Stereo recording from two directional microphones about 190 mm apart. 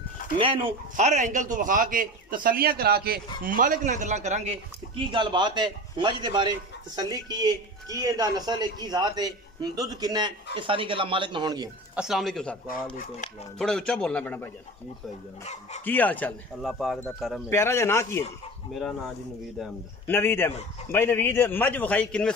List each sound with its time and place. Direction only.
0.4 s speech: 30° right (ahead or behind)
0.9 s a man's voice: 40° right (ahead or behind); by 11.7 s 20° right (ahead or behind)
11.9 s a man's voice: 5° right (ahead or behind)
13.6 s a man's voice: 5° left (ahead or behind)
15.8 s speech: 10° left (ahead or behind)
16.6 s a man's voice: centre (ahead or behind)
17.5 s speech: 15° left (ahead or behind)
20.1 s speech: 10° left (ahead or behind)